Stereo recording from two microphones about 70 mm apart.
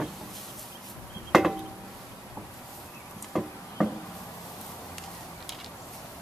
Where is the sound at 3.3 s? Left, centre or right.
Centre.